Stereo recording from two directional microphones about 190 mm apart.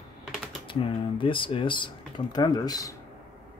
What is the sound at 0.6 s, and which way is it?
Speech, 25° left (ahead or behind).